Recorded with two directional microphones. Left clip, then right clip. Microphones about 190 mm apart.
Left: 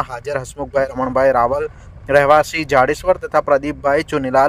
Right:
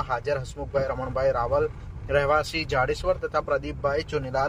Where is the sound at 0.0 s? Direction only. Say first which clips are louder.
Left 5 dB; 40° left (ahead or behind).